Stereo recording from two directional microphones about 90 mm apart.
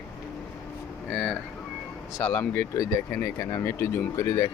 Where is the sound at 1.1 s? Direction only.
20° left (ahead or behind).